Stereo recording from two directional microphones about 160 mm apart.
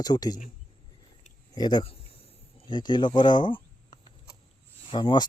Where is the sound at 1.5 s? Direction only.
25° left (ahead or behind).